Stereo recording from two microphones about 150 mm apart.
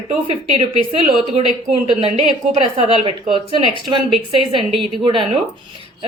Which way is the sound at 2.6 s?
35° right (ahead or behind).